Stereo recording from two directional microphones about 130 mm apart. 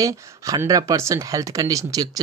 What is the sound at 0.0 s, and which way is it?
Speech, 25° right (ahead or behind).